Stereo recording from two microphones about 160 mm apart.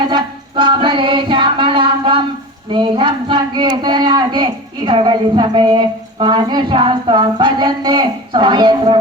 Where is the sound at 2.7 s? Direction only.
30° right (ahead or behind).